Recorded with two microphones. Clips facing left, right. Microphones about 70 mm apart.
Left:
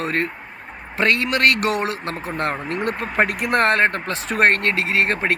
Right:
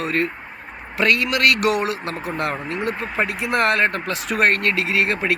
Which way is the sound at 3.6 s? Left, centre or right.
Left.